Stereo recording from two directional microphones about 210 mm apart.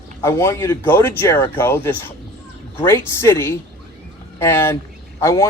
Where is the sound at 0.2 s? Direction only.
15° left (ahead or behind).